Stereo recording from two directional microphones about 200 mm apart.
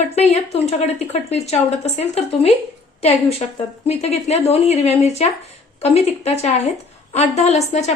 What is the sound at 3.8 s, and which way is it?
Speech, 30° left (ahead or behind).